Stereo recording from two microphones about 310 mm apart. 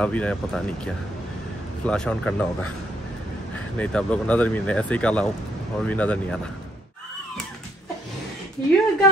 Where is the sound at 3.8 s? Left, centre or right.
Centre.